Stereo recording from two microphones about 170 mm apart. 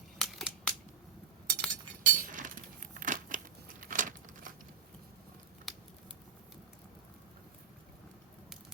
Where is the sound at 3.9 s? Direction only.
50° right (ahead or behind).